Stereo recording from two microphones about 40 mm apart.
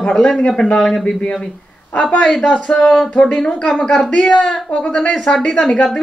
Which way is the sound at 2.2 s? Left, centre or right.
Centre.